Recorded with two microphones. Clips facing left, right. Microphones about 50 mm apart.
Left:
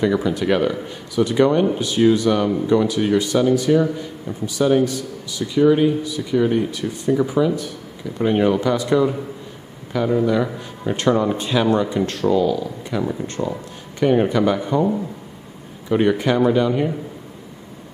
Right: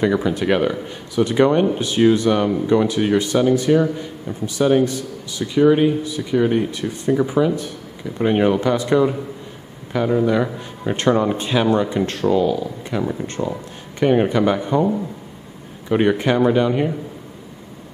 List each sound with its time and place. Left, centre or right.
0.0 s speech: right
13.4 s speech: centre
13.9 s speech: right
15.9 s speech: right